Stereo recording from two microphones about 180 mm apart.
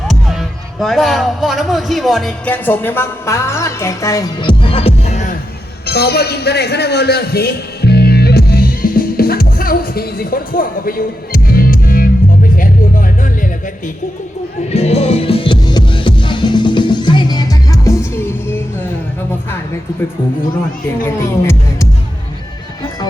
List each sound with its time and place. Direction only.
0.1 s speech: centre (ahead or behind); by 5.4 s 40° left (ahead or behind)
5.8 s a sound: 60° left (ahead or behind)
12.5 s music: 50° left (ahead or behind)
14.7 s music: 35° left (ahead or behind); by 18.9 s 10° left (ahead or behind)